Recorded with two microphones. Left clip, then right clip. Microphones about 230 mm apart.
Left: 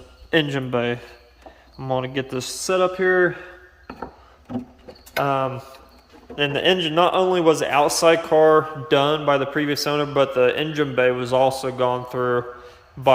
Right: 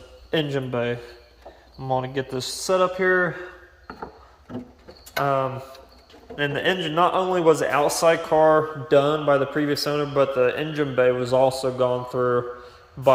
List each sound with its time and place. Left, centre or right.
0.3 s speech: centre
1.8 s a man's voice: left
2.3 s speech: centre
5.2 s a man's voice: left
6.9 s a man's voice: left
11.4 s speech: centre
12.1 s a man's voice: left